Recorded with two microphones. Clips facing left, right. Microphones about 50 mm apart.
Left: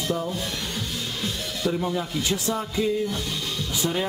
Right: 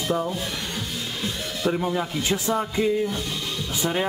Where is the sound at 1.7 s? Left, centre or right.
Right.